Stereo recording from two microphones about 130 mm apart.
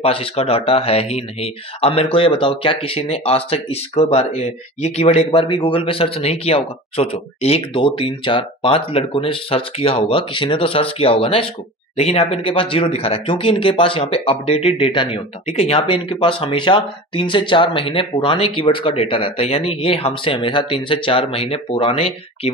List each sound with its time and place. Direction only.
0.0 s speech: 45° left (ahead or behind)